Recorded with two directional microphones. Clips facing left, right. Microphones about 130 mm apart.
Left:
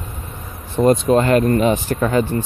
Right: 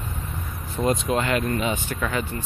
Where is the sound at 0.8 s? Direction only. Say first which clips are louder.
Left 9 dB; 60° left (ahead or behind).